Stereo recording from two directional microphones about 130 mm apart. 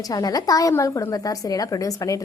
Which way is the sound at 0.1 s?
30° left (ahead or behind).